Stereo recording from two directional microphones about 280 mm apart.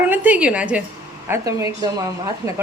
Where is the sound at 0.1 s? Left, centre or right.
Centre.